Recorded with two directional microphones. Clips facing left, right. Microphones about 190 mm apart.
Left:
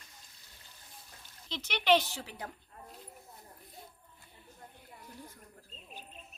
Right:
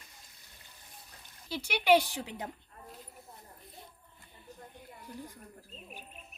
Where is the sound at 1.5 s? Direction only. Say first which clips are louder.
Right 2 dB; 10° right (ahead or behind).